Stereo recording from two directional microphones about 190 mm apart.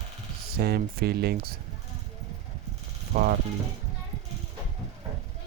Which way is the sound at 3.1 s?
50° right (ahead or behind).